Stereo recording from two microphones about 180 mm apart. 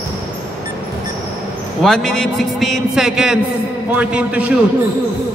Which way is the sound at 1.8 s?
5° left (ahead or behind).